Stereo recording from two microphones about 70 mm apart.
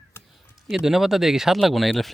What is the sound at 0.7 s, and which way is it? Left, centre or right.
Speech, centre.